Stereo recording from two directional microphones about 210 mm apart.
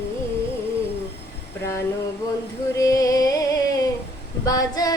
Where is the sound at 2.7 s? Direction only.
15° left (ahead or behind).